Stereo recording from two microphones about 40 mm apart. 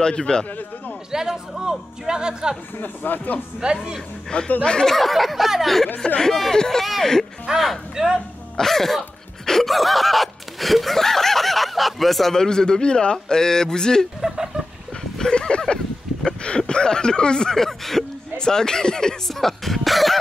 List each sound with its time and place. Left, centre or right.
0.0 s a man's voice: left
1.1 s speech: centre
2.8 s speech: left
3.6 s speech: centre
4.3 s a man's voice: left
4.8 s speech: centre
6.1 s speech: centre
7.9 s speech: centre
8.5 s speech: centre
9.5 s snicker: centre
12.4 s speech: centre
15.3 s horse: left
16.3 s speech: left
17.6 s speech: centre